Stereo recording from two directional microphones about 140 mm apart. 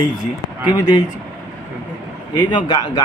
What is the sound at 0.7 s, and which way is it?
Speech, 30° left (ahead or behind).